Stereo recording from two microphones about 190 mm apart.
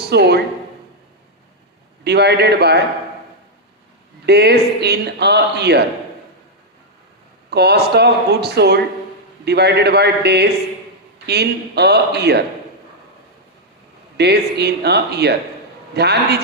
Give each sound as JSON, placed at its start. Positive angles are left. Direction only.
{"t": 0.0, "sound": "speech", "side_deg": -60}
{"t": 2.0, "sound": "a man's voice", "side_deg": -60}
{"t": 4.3, "sound": "a man's voice", "side_deg": -60}
{"t": 7.5, "sound": "a man's voice", "side_deg": -60}
{"t": 14.2, "sound": "a man's voice", "side_deg": -60}